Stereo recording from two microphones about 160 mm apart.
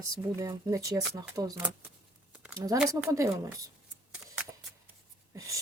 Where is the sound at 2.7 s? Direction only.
20° right (ahead or behind).